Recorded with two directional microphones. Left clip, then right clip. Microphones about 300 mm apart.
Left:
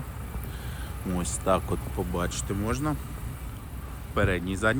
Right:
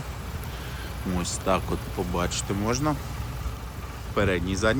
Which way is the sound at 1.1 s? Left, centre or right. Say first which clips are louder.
Even; centre.